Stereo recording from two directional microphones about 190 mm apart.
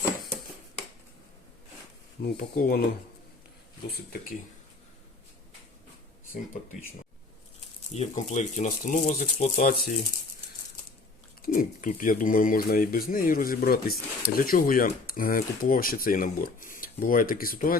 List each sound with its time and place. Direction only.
2.2 s speech: 55° left (ahead or behind)
3.8 s speech: 55° left (ahead or behind)
7.9 s speech: 40° left (ahead or behind)
11.4 s speech: 45° left (ahead or behind)